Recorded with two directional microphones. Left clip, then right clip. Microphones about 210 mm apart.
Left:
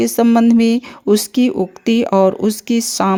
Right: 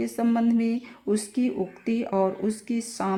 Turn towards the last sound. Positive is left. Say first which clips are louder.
# left 13 dB
turn(degrees=40)  # may be behind; listen again after turning